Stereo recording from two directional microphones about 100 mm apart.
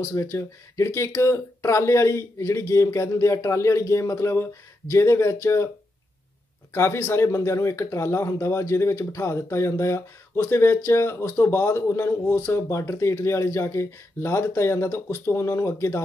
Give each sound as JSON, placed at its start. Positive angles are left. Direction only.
{"t": 0.0, "sound": "speech", "side_deg": 30}
{"t": 6.7, "sound": "speech", "side_deg": 30}